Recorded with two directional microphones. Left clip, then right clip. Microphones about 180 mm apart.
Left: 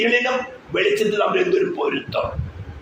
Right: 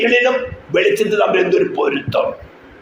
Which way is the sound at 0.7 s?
35° right (ahead or behind).